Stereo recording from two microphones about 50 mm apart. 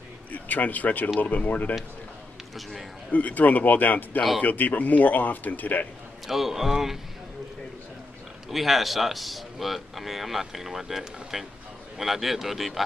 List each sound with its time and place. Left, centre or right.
0.3 s speech: left
3.1 s speech: left
6.2 s a man's voice: centre
8.5 s a man's voice: centre